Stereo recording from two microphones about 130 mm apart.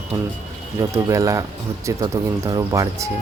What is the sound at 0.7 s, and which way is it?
Speech, 25° right (ahead or behind).